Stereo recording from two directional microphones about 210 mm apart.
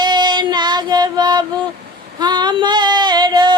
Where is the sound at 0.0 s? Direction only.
20° right (ahead or behind).